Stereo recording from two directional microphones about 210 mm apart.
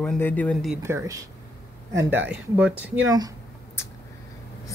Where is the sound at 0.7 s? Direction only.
10° right (ahead or behind).